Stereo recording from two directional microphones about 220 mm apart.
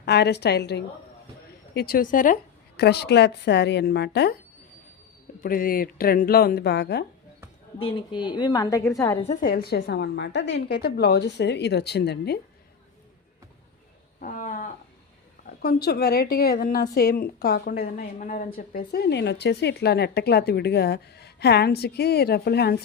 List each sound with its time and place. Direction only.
0.0 s a woman's voice: 50° left (ahead or behind)
5.4 s a woman's voice: 40° left (ahead or behind)
7.8 s a woman's voice: 25° left (ahead or behind)
9.2 s a woman's voice: 35° left (ahead or behind)
14.2 s a sound: 35° left (ahead or behind)
15.4 s a woman's voice: 45° left (ahead or behind)